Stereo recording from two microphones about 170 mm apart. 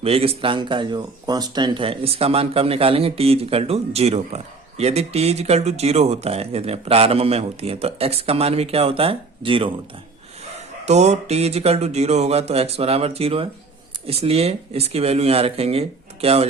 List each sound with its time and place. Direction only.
0.0 s speech: 35° right (ahead or behind)
10.8 s speech: 40° right (ahead or behind)